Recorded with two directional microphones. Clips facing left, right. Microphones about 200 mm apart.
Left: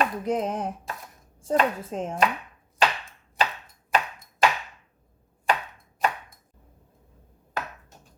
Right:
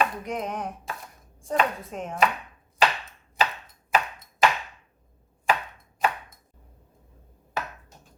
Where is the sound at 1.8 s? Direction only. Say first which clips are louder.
Left 4 dB; 30° left (ahead or behind).